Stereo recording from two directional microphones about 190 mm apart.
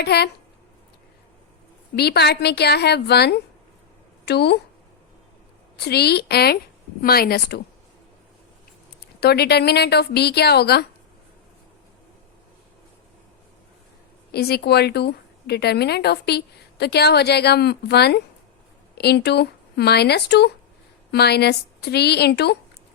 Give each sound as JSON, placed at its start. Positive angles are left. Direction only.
{"t": 0.0, "sound": "a woman's voice", "side_deg": 60}
{"t": 2.0, "sound": "a woman's voice", "side_deg": 60}
{"t": 5.7, "sound": "a woman's voice", "side_deg": 60}
{"t": 9.2, "sound": "a woman's voice", "side_deg": 60}
{"t": 14.3, "sound": "a woman's voice", "side_deg": 55}